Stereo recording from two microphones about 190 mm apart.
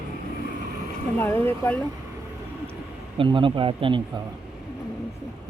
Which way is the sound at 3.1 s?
25° right (ahead or behind).